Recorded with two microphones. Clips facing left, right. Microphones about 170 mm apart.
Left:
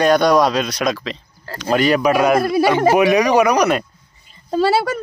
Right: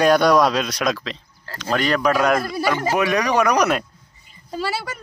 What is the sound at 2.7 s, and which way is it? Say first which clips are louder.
Speech: left 7 dB; 65° left (ahead or behind).